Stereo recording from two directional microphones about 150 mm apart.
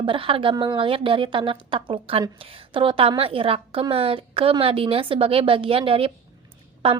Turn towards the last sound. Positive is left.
turn(degrees=-40)  # may be behind; listen again after turning